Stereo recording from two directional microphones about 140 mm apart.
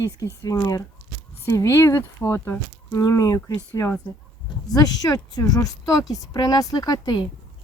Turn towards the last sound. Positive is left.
turn(degrees=30)  # may be behind; listen again after turning